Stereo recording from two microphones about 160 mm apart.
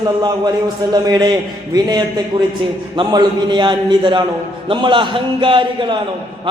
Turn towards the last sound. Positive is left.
turn(degrees=-30)  # may be behind; listen again after turning